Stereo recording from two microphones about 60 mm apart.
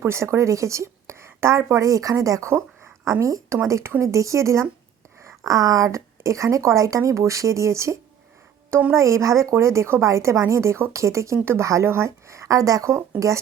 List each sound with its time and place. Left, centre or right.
0.0 s speech: right
2.5 s a woman's voice: right
4.0 s speech: right
5.4 s speech: right